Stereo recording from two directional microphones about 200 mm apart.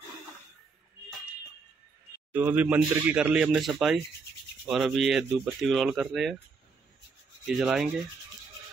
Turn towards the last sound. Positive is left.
turn(degrees=0)  # may be behind; listen again after turning